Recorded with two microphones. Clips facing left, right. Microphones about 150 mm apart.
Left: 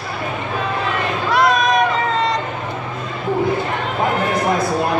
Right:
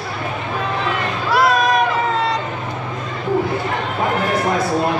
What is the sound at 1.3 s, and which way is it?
Vehicle, 5° right (ahead or behind).